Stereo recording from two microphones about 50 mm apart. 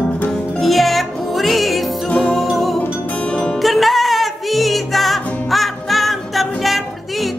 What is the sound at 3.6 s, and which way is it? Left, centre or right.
Music, centre.